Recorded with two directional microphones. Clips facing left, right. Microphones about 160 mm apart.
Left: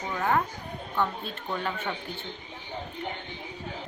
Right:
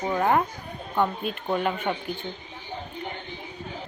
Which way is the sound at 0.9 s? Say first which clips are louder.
Right 5 dB; 15° right (ahead or behind).